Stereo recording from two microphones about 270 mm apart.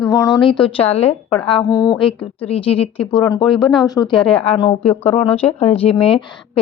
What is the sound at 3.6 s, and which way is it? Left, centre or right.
Speech, centre.